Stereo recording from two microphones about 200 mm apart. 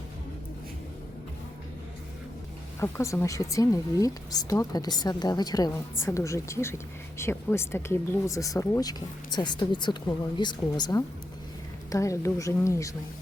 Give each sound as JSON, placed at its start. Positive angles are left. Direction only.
{"t": 2.8, "sound": "speech", "side_deg": 15}